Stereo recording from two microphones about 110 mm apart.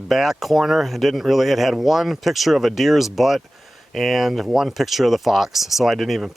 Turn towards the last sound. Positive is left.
turn(degrees=0)  # may be behind; listen again after turning